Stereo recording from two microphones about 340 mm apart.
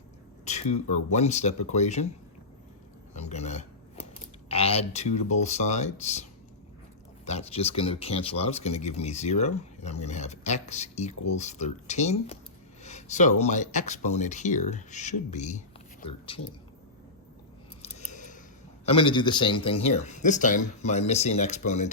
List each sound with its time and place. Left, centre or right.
0.4 s speech: centre
3.2 s a sound: centre
4.4 s speech: centre
7.3 s speech: centre
17.8 s scissors: centre
18.9 s speech: centre